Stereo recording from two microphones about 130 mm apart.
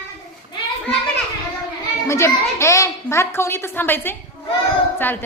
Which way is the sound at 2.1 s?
20° left (ahead or behind).